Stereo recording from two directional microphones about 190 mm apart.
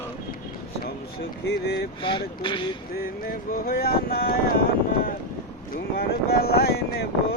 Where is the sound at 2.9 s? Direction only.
50° left (ahead or behind).